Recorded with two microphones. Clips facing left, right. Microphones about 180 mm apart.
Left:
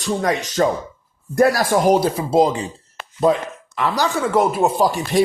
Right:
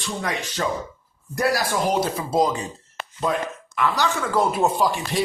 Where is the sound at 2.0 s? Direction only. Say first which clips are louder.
Left 5 dB; 30° left (ahead or behind).